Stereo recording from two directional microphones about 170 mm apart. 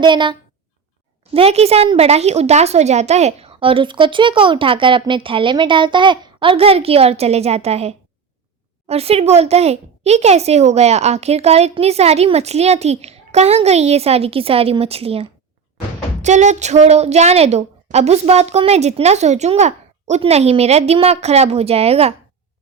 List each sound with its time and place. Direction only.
0.0 s a woman's voice: 25° right (ahead or behind)